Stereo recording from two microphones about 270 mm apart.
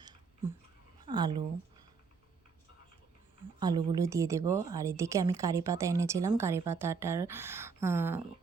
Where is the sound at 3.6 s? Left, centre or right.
Centre.